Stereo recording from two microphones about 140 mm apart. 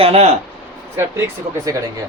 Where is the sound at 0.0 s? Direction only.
45° right (ahead or behind).